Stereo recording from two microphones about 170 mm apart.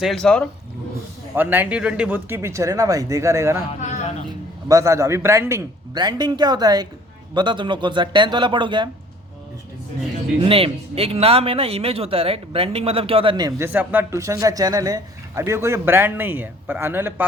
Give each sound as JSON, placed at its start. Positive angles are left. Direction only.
{"t": 0.0, "sound": "speech", "side_deg": 0}
{"t": 1.4, "sound": "a man's voice", "side_deg": -10}
{"t": 4.7, "sound": "speech", "side_deg": -20}
{"t": 10.4, "sound": "speech", "side_deg": -35}
{"t": 13.7, "sound": "a man's voice", "side_deg": -10}